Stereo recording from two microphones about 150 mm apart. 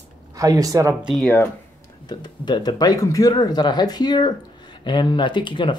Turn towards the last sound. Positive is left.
turn(degrees=30)  # may be behind; listen again after turning